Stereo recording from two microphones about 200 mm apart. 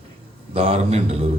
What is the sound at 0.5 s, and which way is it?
Speech, 30° right (ahead or behind).